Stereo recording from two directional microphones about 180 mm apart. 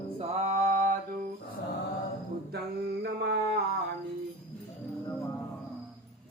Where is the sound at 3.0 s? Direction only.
65° right (ahead or behind).